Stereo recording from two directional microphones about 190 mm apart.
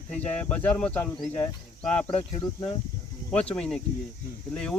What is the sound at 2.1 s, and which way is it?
Speech, 25° left (ahead or behind).